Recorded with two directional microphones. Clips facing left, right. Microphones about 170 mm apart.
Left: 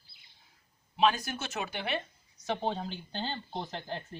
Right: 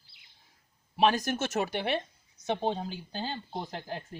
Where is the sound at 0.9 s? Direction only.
45° right (ahead or behind).